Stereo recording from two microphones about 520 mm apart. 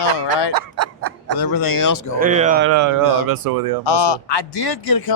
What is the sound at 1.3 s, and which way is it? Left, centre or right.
Speech, left.